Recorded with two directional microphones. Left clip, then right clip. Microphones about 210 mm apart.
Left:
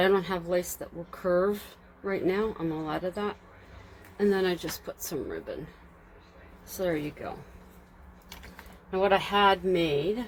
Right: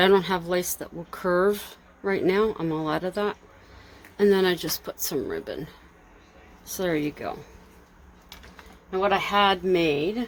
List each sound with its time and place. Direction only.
0.0 s speech: 45° right (ahead or behind)
6.7 s speech: 50° right (ahead or behind)
9.0 s speech: 35° right (ahead or behind)